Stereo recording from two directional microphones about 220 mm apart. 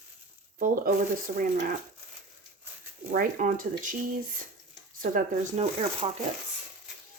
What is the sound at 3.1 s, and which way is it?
Speech, 35° right (ahead or behind).